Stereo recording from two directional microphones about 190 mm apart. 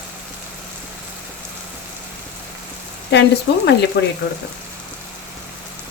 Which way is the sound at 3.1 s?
65° left (ahead or behind).